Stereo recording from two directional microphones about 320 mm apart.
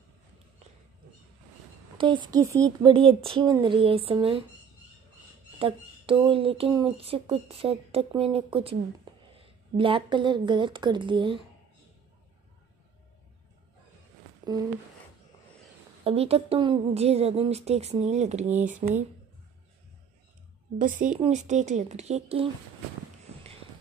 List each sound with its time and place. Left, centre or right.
2.0 s speech: centre
5.6 s speech: centre
16.0 s a woman's voice: centre
20.7 s a woman's voice: right